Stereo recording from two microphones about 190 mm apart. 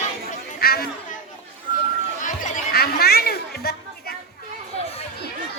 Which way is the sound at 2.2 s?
50° left (ahead or behind).